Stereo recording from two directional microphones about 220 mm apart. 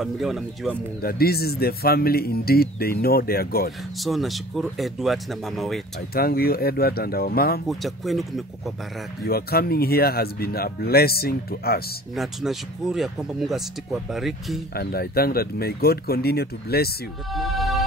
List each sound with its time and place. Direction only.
0.0 s speech: centre (ahead or behind)
1.0 s speech: 45° left (ahead or behind)
4.0 s speech: centre (ahead or behind)
6.1 s speech: 45° left (ahead or behind)
7.6 s speech: centre (ahead or behind)
9.2 s speech: 45° left (ahead or behind)
12.2 s speech: centre (ahead or behind)
14.7 s speech: 45° left (ahead or behind)
17.3 s music: centre (ahead or behind)